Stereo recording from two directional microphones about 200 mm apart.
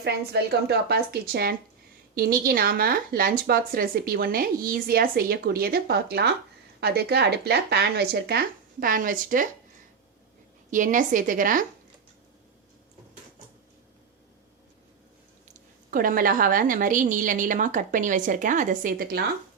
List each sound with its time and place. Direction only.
0.0 s speech: 55° right (ahead or behind)
10.7 s a woman's voice: 40° right (ahead or behind)
15.5 s a woman's voice: 40° right (ahead or behind)